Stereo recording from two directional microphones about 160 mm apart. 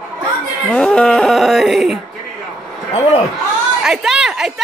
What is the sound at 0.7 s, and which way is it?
Music, 5° left (ahead or behind).